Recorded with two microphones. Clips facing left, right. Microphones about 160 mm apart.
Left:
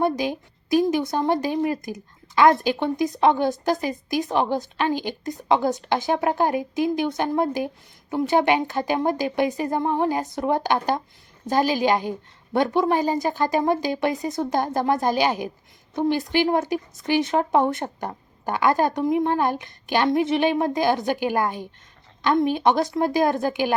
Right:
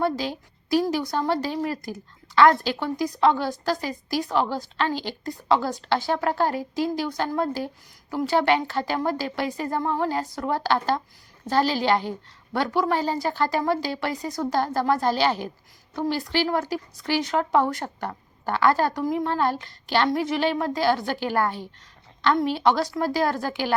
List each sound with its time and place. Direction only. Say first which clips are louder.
0.0 s a woman's voice: left 3 dB; 20° left (ahead or behind)